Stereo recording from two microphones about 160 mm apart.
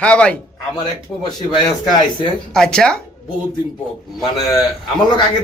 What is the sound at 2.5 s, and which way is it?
Speech, 5° left (ahead or behind).